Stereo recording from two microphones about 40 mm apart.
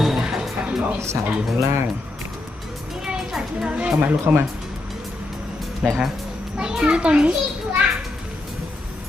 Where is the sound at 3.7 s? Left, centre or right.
Right.